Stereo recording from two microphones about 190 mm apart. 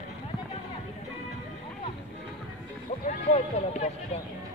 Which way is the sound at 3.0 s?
35° left (ahead or behind).